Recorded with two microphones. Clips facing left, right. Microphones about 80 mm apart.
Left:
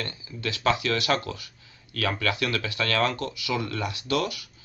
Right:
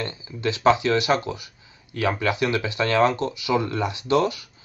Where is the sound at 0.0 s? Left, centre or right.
Right.